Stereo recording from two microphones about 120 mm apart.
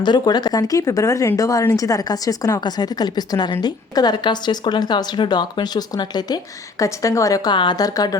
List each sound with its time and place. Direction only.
0.0 s speech: 35° left (ahead or behind)